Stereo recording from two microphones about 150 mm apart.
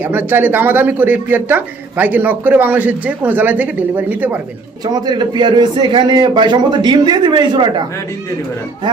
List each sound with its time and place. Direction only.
0.0 s speech: 10° right (ahead or behind)
4.9 s a man's voice: 25° right (ahead or behind)